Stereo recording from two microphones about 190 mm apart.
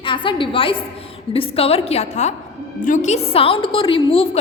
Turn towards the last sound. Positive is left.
turn(degrees=30)  # may be behind; listen again after turning